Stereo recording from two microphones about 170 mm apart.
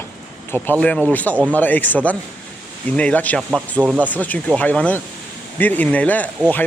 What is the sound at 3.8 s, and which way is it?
Speech, 10° right (ahead or behind).